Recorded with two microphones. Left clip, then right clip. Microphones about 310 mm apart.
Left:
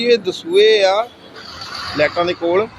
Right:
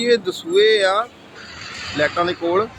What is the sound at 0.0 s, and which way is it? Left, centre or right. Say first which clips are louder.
Speech: left 3 dB; centre.